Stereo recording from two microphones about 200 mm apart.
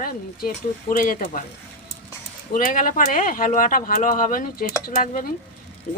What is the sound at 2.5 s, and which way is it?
Speech, 45° left (ahead or behind).